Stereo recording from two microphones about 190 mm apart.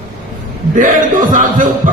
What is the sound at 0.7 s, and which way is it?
Speech, 45° right (ahead or behind).